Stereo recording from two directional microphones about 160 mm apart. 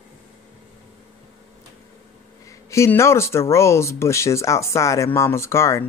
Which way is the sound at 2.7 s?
15° left (ahead or behind).